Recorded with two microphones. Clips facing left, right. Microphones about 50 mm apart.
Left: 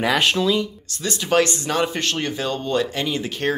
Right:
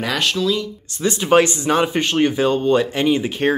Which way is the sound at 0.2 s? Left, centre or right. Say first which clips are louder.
Left 1 dB; left.